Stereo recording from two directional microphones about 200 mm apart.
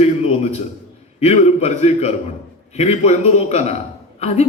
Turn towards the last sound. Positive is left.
turn(degrees=35)  # may be behind; listen again after turning